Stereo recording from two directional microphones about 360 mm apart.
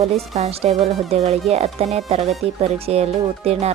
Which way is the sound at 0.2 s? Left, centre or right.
Centre.